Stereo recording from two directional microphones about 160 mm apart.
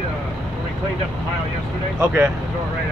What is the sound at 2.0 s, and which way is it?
Speech, 10° right (ahead or behind).